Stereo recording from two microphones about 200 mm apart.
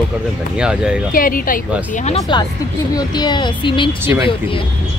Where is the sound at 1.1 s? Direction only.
45° left (ahead or behind).